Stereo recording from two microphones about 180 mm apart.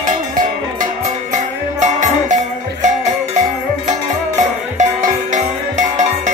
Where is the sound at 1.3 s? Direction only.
40° right (ahead or behind).